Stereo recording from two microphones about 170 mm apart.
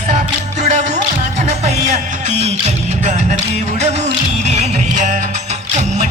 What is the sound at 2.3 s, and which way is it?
Speech, 40° right (ahead or behind).